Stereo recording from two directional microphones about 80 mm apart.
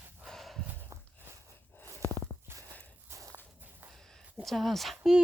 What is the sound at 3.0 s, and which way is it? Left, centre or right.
Walk, right.